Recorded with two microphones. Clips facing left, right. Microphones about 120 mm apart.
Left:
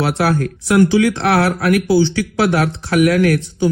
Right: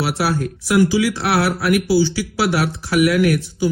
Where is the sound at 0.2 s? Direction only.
50° left (ahead or behind).